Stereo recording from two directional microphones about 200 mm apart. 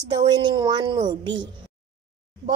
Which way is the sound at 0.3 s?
20° right (ahead or behind).